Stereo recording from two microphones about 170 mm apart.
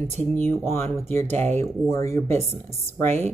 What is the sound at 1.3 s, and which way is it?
Speech, 40° right (ahead or behind).